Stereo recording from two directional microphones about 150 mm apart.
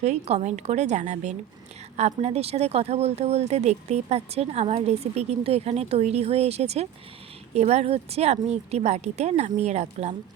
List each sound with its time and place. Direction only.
0.0 s speech: 45° right (ahead or behind)